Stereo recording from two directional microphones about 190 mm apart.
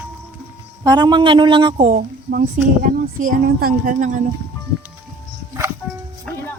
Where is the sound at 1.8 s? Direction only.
45° right (ahead or behind).